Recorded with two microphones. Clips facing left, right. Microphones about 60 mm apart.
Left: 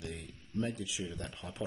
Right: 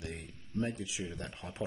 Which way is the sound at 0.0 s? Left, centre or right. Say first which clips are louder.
Even; right.